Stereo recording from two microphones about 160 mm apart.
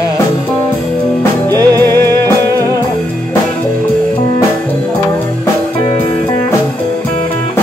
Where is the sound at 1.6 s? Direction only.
25° right (ahead or behind).